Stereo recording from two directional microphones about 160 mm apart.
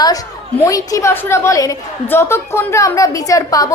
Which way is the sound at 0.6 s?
20° left (ahead or behind).